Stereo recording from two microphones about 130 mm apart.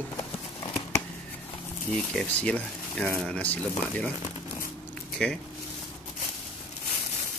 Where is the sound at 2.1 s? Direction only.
10° left (ahead or behind).